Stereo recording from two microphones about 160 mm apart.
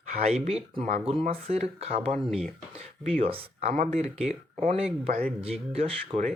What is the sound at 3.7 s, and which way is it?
Speech, 45° right (ahead or behind).